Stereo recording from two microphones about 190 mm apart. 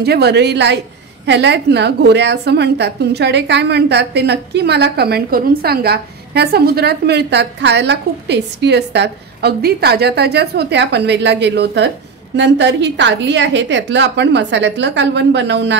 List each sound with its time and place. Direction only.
0.0 s a woman's voice: 60° right (ahead or behind)